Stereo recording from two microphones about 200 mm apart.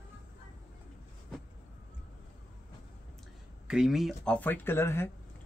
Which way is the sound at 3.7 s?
Centre (ahead or behind).